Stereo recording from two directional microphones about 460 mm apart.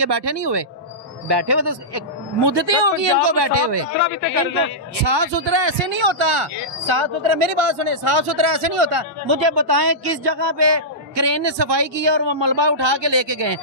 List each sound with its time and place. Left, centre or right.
0.0 s speech: right
5.0 s speech: right